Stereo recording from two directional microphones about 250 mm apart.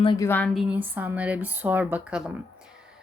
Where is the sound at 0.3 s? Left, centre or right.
Centre.